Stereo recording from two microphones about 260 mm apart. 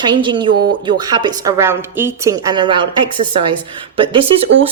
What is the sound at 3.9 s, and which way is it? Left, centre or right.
Speech, centre.